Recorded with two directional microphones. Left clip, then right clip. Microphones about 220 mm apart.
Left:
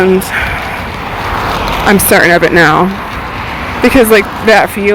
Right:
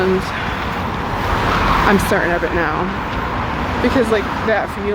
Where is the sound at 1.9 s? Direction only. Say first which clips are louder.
Left 9 dB; 40° left (ahead or behind).